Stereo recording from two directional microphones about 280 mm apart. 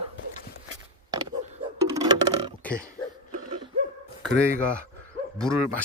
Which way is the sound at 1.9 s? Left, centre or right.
Centre.